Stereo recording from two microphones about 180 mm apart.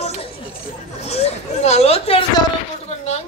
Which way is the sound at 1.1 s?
35° left (ahead or behind).